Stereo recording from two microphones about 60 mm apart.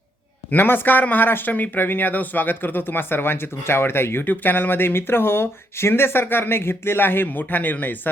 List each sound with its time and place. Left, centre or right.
0.5 s speech: left